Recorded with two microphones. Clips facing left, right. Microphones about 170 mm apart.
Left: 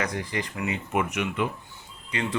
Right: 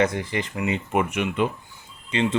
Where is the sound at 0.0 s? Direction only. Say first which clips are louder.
Right 6 dB; 25° right (ahead or behind).